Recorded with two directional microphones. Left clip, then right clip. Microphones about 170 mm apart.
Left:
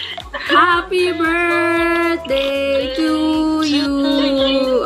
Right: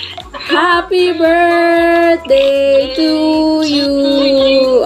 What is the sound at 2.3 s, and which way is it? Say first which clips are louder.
Music: right 8 dB; 5° right (ahead or behind).